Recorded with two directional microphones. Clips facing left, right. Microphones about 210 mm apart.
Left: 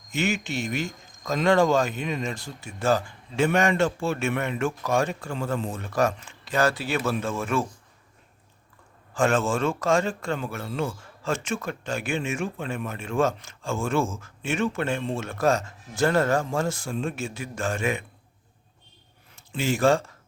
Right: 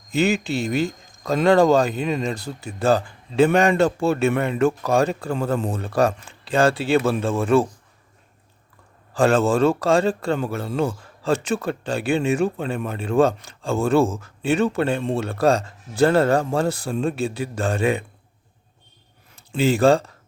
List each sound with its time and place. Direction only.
0.1 s speech: 35° right (ahead or behind)
9.1 s speech: 35° right (ahead or behind)
19.4 s speech: 35° right (ahead or behind)